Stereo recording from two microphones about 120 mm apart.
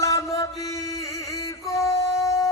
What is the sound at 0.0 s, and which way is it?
Mantra, 25° left (ahead or behind).